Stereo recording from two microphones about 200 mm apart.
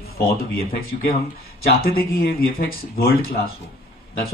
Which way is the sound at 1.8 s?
50° left (ahead or behind).